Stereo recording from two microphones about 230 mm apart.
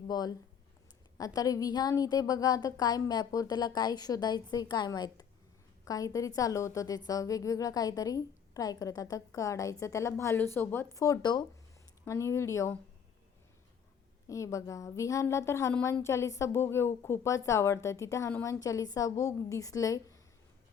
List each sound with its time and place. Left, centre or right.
0.1 s a woman's voice: centre
14.3 s a woman's voice: centre